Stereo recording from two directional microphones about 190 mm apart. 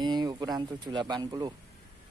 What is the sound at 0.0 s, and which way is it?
Speech, 20° right (ahead or behind).